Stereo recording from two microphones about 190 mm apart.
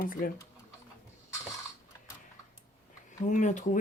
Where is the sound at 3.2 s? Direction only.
40° left (ahead or behind).